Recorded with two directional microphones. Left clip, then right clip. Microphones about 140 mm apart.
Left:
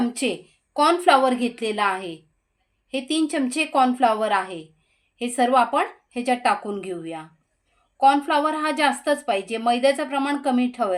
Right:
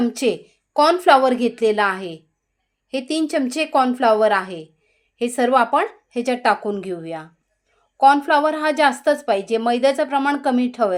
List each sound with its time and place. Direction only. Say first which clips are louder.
0.0 s a woman's voice: right 5 dB; 45° right (ahead or behind)